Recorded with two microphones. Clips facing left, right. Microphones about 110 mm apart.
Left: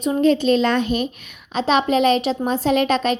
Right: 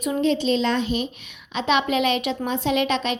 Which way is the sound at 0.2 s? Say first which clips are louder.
Left 5 dB; 50° left (ahead or behind).